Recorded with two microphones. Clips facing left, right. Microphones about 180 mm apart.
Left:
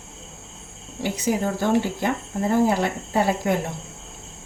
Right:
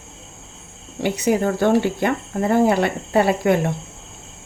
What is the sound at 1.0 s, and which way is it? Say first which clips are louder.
Speech: right 5 dB; 65° right (ahead or behind).